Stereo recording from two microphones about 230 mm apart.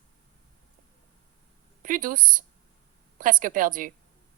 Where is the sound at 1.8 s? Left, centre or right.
Right.